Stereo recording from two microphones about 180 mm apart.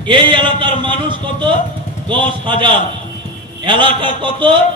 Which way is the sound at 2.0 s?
25° right (ahead or behind).